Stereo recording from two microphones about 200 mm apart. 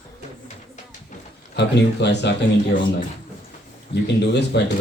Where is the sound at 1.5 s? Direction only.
60° left (ahead or behind).